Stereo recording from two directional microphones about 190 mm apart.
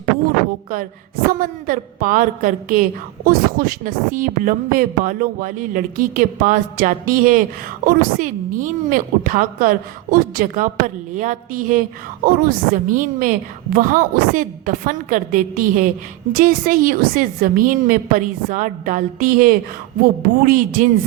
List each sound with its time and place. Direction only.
1.3 s a woman's voice: 45° right (ahead or behind)